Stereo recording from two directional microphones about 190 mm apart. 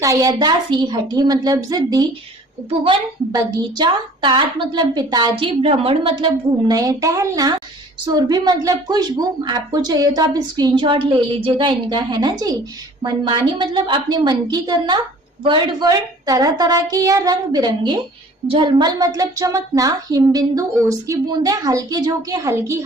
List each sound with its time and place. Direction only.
0.0 s a woman's voice: 20° right (ahead or behind)